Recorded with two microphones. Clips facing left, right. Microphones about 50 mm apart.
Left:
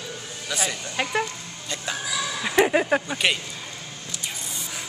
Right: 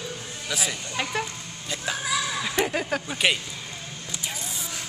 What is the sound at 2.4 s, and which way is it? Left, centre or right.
Speech, centre.